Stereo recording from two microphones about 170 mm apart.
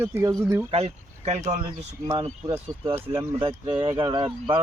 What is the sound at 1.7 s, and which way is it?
A man's voice, 25° right (ahead or behind).